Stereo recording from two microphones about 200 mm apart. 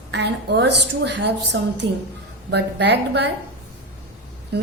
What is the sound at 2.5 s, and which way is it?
Speech, 55° right (ahead or behind).